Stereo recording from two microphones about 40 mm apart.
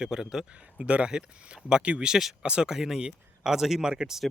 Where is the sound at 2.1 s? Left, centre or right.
Centre.